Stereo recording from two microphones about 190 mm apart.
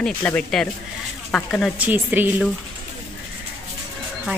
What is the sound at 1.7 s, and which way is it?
Speech, 10° right (ahead or behind).